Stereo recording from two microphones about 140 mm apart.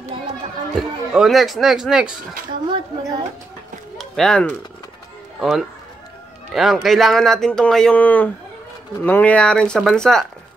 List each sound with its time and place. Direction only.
0.7 s speech: centre (ahead or behind)
2.7 s speech: 30° right (ahead or behind)
4.0 s speech: 5° left (ahead or behind)